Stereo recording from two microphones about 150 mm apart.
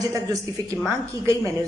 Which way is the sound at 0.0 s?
20° right (ahead or behind).